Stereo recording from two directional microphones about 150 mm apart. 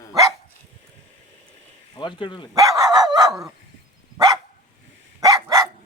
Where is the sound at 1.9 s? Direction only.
35° left (ahead or behind).